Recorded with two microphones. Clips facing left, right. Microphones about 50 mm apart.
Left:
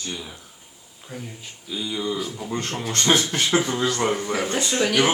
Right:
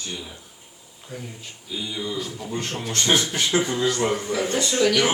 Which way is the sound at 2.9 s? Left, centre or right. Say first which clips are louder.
Left 1 dB; left.